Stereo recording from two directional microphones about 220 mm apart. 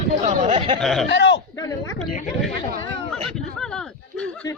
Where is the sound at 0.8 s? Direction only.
Centre (ahead or behind).